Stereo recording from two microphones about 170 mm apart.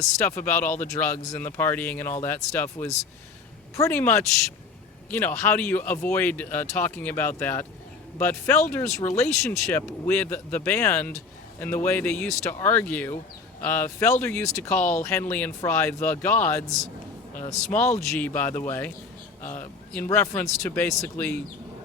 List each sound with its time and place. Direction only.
0.0 s speech: 15° left (ahead or behind)
20.1 s speech: 15° left (ahead or behind)